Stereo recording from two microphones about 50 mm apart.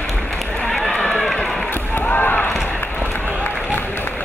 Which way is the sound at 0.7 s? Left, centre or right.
Centre.